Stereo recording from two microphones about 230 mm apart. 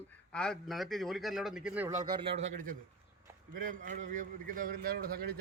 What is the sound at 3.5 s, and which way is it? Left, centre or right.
A man's voice, right.